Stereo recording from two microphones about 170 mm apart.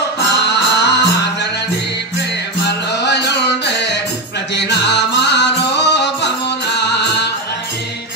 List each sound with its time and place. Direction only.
0.2 s music: 90° left
2.6 s music: 80° left